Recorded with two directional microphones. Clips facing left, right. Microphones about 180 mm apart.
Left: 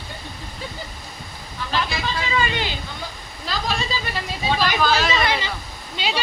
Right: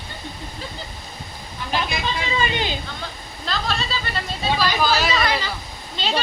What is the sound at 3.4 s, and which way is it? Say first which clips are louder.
Speech: even; 10° left (ahead or behind).